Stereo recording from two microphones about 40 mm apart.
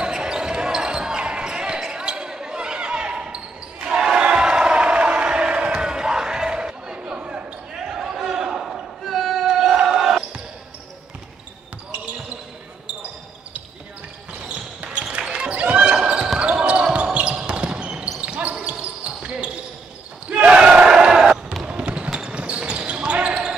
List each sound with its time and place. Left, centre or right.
0.0 s basketball bounce: right
3.8 s crowd: centre
7.7 s basketball bounce: centre
9.0 s a sound: centre
9.5 s crowd: centre
9.8 s basketball bounce: centre
15.1 s basketball bounce: right
15.5 s basketball bounce: right
20.9 s a sound: centre
21.6 s trickle: right
22.2 s basketball bounce: right